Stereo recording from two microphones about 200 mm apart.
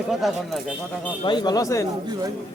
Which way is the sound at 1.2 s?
20° left (ahead or behind).